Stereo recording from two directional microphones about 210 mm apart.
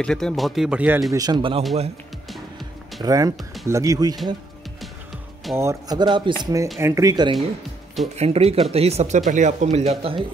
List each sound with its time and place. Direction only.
0.0 s speech: 5° left (ahead or behind); by 1.6 s 20° right (ahead or behind)
3.0 s speech: 15° right (ahead or behind)
5.6 s speech: 15° right (ahead or behind)
8.2 s speech: 30° right (ahead or behind)